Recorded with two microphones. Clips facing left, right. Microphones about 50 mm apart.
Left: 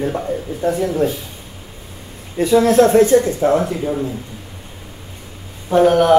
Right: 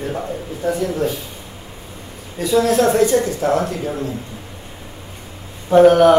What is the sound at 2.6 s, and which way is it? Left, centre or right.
A woman's voice, left.